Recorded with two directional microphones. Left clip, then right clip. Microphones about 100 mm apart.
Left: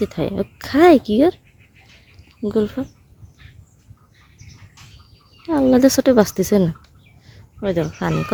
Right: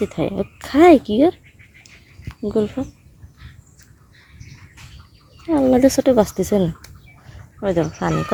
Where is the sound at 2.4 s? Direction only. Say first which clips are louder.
Even; 55° left (ahead or behind).